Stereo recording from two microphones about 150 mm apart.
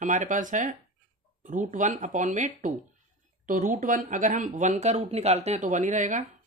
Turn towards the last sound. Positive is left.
turn(degrees=-55)  # may be behind; listen again after turning